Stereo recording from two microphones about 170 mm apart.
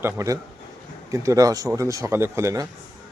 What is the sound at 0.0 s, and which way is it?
Speech, 15° right (ahead or behind).